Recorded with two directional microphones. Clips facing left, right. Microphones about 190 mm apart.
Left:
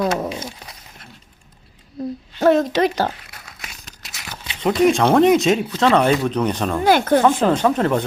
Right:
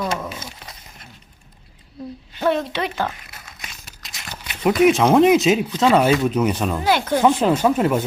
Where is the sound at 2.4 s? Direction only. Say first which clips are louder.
Left 6 dB; 45° left (ahead or behind).